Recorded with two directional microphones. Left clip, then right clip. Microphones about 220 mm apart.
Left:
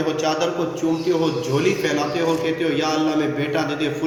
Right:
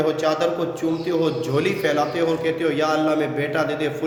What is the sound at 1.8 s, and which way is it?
A man's voice, 20° right (ahead or behind).